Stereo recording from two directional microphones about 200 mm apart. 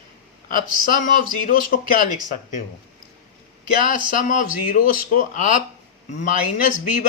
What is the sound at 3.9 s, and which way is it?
Speech, 40° left (ahead or behind).